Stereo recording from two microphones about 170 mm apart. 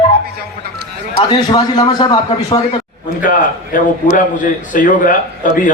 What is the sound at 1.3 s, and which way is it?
A man's voice, 25° left (ahead or behind).